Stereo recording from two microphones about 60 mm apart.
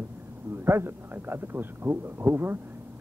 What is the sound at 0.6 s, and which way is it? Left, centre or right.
Speech, right.